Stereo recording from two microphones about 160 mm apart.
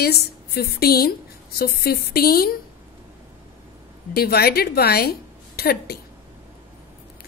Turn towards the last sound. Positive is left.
turn(degrees=80)